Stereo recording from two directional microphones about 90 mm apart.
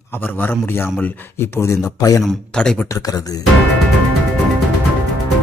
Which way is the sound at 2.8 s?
40° left (ahead or behind).